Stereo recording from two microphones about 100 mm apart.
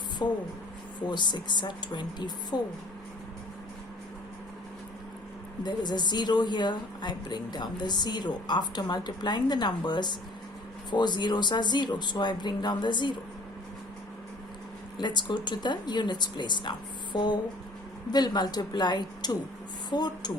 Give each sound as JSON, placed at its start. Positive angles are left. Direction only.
{"t": 0.2, "sound": "a woman's voice", "side_deg": 40}
{"t": 5.6, "sound": "a woman's voice", "side_deg": 45}
{"t": 14.9, "sound": "a woman's voice", "side_deg": 50}